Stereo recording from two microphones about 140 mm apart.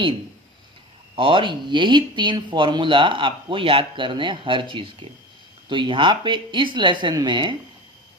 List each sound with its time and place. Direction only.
1.1 s speech: 40° right (ahead or behind)